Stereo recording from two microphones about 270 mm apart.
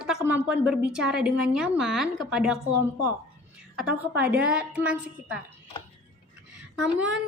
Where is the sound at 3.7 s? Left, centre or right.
Centre.